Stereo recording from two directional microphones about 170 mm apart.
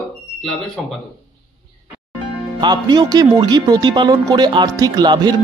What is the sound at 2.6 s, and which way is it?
Speech, 25° right (ahead or behind).